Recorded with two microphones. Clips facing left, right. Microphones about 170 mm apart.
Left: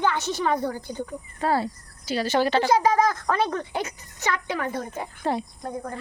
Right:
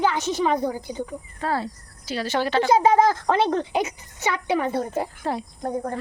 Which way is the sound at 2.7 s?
25° right (ahead or behind).